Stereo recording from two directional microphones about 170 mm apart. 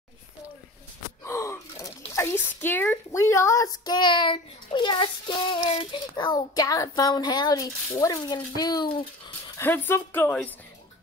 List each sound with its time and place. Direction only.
1.2 s speech: 15° left (ahead or behind)
9.6 s a woman's voice: 15° left (ahead or behind)